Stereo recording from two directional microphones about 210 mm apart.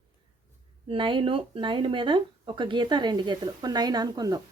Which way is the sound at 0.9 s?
25° right (ahead or behind).